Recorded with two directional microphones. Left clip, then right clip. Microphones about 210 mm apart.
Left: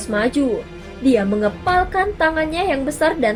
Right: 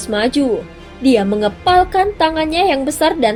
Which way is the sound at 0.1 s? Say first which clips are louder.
Right 3 dB; 35° right (ahead or behind).